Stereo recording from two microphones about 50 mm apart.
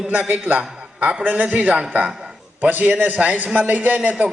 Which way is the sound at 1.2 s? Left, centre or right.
Right.